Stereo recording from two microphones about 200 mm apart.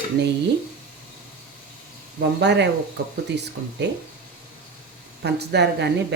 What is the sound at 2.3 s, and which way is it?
Speech, 60° right (ahead or behind).